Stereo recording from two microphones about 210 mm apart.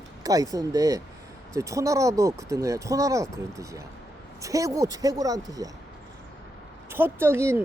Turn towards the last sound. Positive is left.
turn(degrees=-10)  # may be behind; listen again after turning